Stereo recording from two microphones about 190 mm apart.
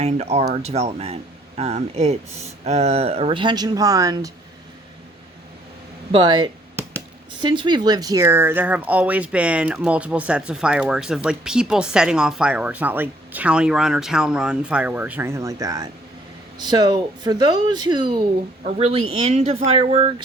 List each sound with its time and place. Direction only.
0.0 s speech: 35° right (ahead or behind); by 4.3 s 20° right (ahead or behind)
6.1 s speech: 25° right (ahead or behind)